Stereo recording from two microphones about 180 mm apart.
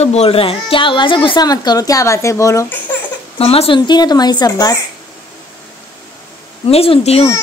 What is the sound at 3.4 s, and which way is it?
A child's voice, 35° left (ahead or behind).